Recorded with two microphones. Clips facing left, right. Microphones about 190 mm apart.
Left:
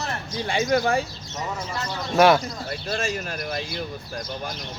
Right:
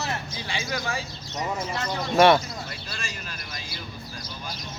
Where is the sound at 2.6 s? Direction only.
55° left (ahead or behind).